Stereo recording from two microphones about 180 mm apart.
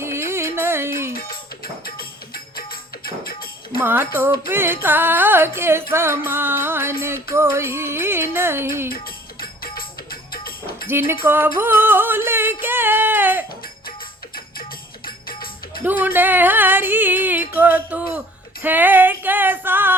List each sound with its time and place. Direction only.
0.0 s music: 15° right (ahead or behind)
1.1 s music: 55° left (ahead or behind)
3.8 s music: 15° right (ahead or behind)
8.9 s music: 55° left (ahead or behind)
11.1 s music: 10° right (ahead or behind)
12.6 s a sound: 10° right (ahead or behind)
15.0 s music: 55° left (ahead or behind)
15.8 s speech: 10° right (ahead or behind)
16.1 s music: 10° right (ahead or behind)
17.5 s a sound: 10° right (ahead or behind)
18.6 s female singing: 10° right (ahead or behind)